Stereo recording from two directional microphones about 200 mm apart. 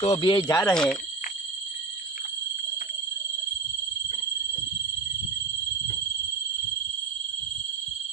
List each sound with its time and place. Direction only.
0.0 s speech: 30° left (ahead or behind)
0.6 s speech: 5° left (ahead or behind)